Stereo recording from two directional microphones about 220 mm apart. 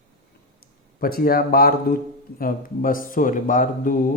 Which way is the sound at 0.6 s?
40° left (ahead or behind).